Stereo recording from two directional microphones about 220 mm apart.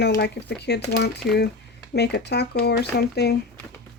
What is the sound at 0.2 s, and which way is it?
Speech, 50° left (ahead or behind).